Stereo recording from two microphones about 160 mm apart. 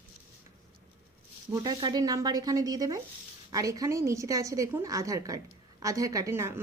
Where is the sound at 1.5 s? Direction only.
25° right (ahead or behind).